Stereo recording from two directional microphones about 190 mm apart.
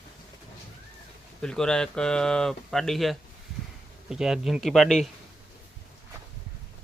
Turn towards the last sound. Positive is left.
turn(degrees=0)  # may be behind; listen again after turning